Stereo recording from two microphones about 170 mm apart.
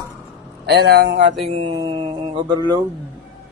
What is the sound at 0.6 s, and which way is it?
Speech, 75° right (ahead or behind).